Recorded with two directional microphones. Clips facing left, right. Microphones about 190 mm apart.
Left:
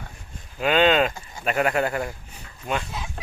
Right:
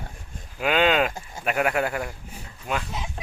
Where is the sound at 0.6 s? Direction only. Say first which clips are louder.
Left 2 dB; 5° right (ahead or behind).